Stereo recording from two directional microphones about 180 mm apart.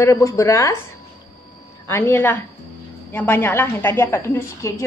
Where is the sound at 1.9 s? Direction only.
10° left (ahead or behind).